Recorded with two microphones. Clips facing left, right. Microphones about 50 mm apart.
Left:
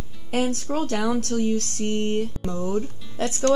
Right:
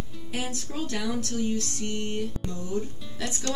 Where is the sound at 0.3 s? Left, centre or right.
Left.